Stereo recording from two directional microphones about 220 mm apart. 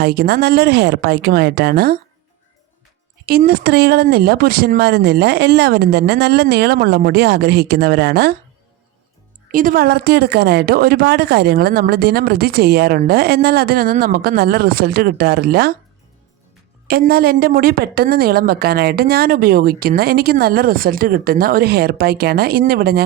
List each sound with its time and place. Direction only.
0.0 s a woman's voice: 45° right (ahead or behind)
3.2 s a woman's voice: 45° right (ahead or behind)
9.5 s a woman's voice: 40° right (ahead or behind)
16.8 s a woman's voice: 45° right (ahead or behind)